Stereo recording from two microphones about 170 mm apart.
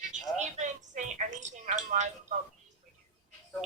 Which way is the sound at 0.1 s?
45° right (ahead or behind).